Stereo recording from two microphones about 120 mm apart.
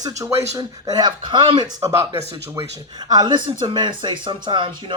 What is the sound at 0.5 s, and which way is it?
Speech, 30° right (ahead or behind).